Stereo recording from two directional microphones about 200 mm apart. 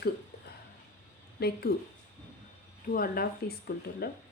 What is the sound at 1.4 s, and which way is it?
Speech, 50° left (ahead or behind).